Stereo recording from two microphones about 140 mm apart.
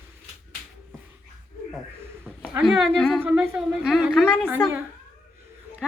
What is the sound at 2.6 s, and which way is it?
A woman's voice, 5° left (ahead or behind).